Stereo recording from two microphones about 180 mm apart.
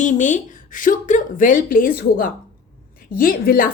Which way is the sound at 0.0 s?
45° left (ahead or behind).